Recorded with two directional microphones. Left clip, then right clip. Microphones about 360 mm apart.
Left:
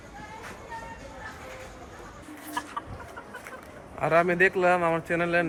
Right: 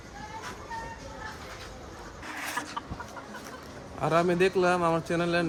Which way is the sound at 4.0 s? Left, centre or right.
Centre.